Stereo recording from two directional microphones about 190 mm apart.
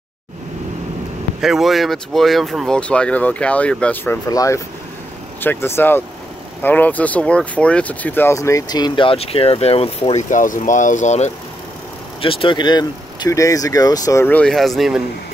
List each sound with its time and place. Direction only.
1.4 s speech: centre (ahead or behind)